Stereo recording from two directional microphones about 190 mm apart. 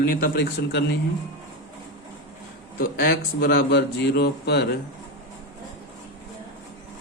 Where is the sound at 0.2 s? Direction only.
55° left (ahead or behind).